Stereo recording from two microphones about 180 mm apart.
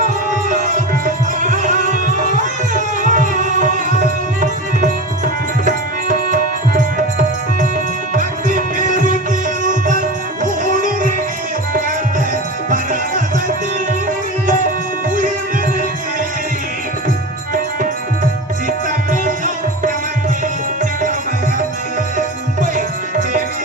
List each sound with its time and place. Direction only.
0.0 s music: 45° right (ahead or behind)
8.1 s music: 45° right (ahead or behind)
12.7 s music: 50° right (ahead or behind)
18.9 s music: 50° right (ahead or behind)